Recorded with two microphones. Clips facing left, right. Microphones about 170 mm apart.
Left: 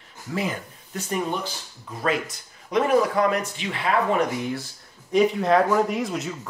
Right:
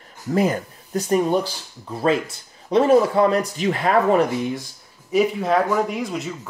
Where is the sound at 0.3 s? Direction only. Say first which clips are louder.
Right 8 dB; 40° right (ahead or behind).